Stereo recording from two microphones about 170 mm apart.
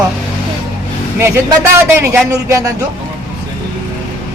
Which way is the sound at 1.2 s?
15° right (ahead or behind).